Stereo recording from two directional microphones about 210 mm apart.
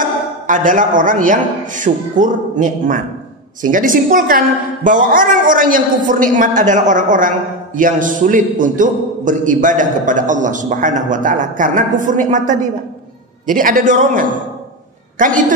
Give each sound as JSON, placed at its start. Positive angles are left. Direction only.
{"t": 0.0, "sound": "a woman's voice", "side_deg": -40}